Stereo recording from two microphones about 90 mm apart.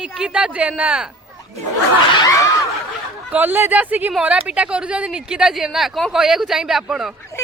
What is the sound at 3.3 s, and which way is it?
Speech, 20° right (ahead or behind).